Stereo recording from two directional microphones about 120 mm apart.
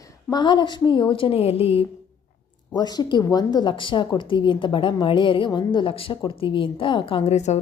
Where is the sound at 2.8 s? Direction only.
35° left (ahead or behind).